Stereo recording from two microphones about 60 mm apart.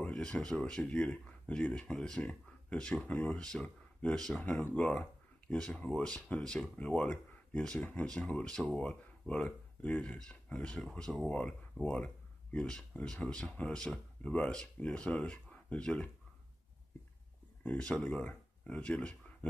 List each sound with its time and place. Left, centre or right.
0.0 s speech: centre
17.7 s speech: centre